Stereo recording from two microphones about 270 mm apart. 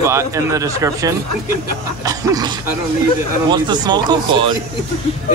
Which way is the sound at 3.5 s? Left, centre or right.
Centre.